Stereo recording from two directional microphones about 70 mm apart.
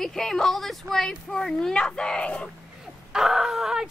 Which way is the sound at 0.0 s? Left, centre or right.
Centre.